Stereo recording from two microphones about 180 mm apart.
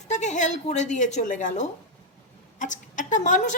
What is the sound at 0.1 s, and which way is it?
A woman's voice, 40° left (ahead or behind).